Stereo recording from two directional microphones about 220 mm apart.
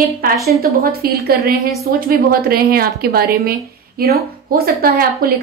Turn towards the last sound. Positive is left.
turn(degrees=-45)  # may be behind; listen again after turning